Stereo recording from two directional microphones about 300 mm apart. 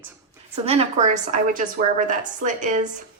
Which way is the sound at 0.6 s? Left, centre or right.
Centre.